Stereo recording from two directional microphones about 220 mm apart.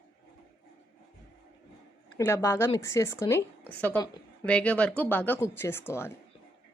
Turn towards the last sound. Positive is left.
turn(degrees=10)  # may be behind; listen again after turning